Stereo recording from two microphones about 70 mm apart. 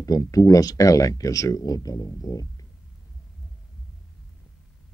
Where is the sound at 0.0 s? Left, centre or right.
Left.